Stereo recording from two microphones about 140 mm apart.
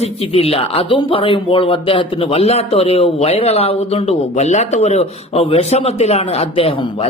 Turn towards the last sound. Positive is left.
turn(degrees=40)  # may be behind; listen again after turning